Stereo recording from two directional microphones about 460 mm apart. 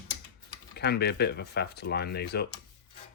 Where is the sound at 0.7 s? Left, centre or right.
Left.